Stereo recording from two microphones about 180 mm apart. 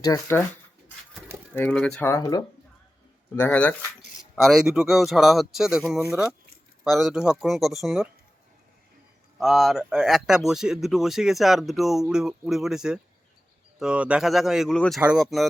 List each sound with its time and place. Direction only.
0.0 s speech: 15° left (ahead or behind)
1.5 s speech: 5° left (ahead or behind)
4.4 s speech: centre (ahead or behind)
9.4 s speech: centre (ahead or behind)